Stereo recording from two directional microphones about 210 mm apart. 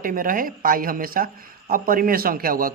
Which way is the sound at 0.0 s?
40° right (ahead or behind).